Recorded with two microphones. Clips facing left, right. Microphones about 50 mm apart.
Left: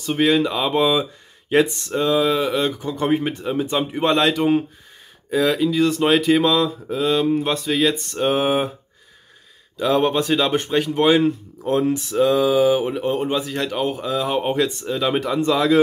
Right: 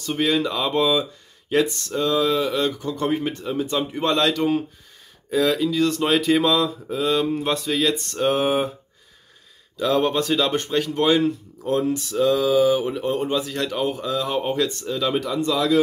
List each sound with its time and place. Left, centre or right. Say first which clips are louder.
0.0 s speech: left 4 dB; centre
5.3 s speech: left 2 dB; centre
9.8 s speech: left 2 dB; centre; by 15.8 s left